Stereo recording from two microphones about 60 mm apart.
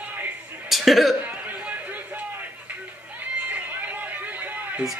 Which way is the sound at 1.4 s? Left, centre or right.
Right.